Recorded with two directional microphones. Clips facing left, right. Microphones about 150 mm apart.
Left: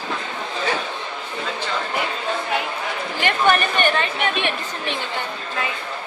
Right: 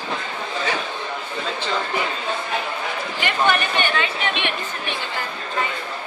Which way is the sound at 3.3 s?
45° left (ahead or behind).